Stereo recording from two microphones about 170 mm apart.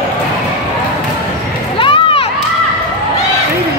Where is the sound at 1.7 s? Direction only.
30° left (ahead or behind).